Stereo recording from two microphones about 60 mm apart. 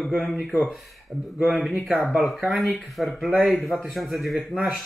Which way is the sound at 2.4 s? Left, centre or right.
Centre.